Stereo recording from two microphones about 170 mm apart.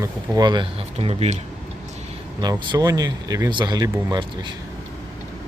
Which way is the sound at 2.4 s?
25° right (ahead or behind).